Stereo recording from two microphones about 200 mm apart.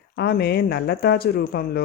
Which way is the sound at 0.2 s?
55° left (ahead or behind).